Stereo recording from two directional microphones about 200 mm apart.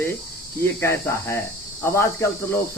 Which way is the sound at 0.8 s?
15° left (ahead or behind).